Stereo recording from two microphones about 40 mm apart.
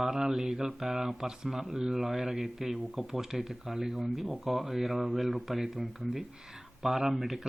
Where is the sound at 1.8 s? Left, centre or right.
Centre.